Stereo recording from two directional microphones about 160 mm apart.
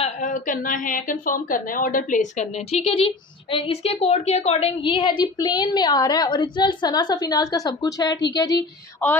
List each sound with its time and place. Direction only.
0.0 s a woman's voice: 50° left (ahead or behind); by 8.5 s 25° left (ahead or behind)
9.0 s speech: 15° left (ahead or behind)